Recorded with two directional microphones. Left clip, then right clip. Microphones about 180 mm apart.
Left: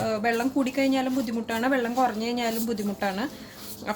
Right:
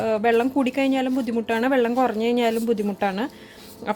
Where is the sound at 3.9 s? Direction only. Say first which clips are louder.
Right 5 dB; 40° right (ahead or behind).